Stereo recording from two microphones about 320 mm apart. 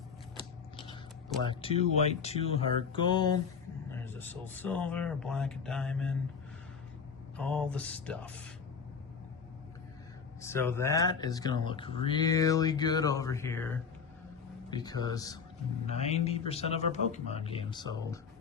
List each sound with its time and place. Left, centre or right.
1.4 s speech: centre
7.3 s speech: centre
10.4 s a man's voice: centre